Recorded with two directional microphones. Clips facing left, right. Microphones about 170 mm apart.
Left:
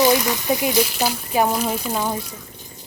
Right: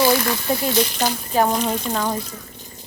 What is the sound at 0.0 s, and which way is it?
Speech, 20° left (ahead or behind).